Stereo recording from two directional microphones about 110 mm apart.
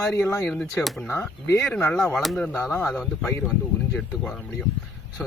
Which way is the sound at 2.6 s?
25° left (ahead or behind).